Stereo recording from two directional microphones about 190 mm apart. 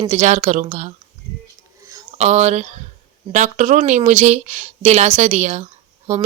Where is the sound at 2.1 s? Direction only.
35° right (ahead or behind).